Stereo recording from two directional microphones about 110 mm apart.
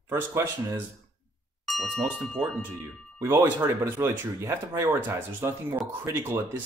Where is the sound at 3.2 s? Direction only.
25° right (ahead or behind).